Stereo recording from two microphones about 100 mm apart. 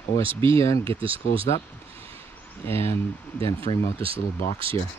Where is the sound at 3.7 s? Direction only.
65° left (ahead or behind).